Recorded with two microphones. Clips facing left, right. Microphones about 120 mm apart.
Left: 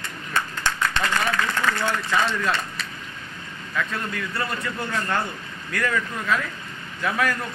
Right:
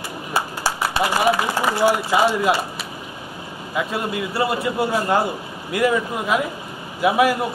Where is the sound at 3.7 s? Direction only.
15° right (ahead or behind).